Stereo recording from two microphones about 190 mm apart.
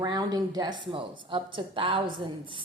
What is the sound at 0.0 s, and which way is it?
A woman's voice, 20° right (ahead or behind).